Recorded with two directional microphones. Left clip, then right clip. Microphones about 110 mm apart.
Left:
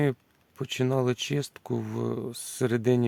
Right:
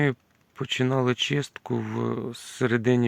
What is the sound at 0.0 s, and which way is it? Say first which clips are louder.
Speech: right 2 dB; 35° left (ahead or behind).